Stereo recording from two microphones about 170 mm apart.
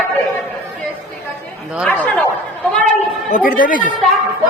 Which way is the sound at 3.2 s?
50° left (ahead or behind).